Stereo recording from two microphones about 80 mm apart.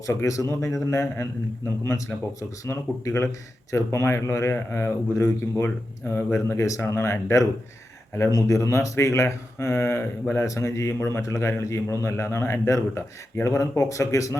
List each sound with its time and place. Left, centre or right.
0.0 s a man's voice: left
6.5 s a man's voice: left